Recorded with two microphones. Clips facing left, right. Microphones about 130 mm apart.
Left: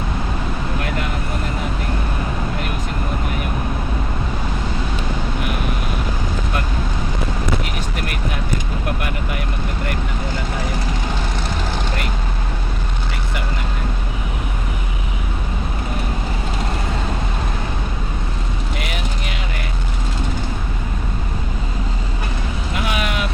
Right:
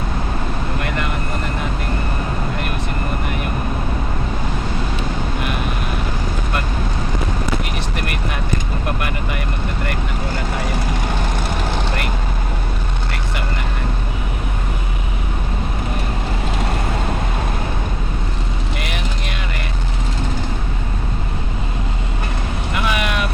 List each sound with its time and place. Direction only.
9.0 s vehicle: 90° right
22.7 s vehicle: 80° right